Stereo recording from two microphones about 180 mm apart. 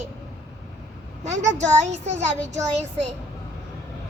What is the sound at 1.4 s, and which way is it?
A child's voice, 40° right (ahead or behind).